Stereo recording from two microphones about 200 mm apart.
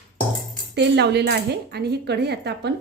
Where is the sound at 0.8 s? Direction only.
55° right (ahead or behind).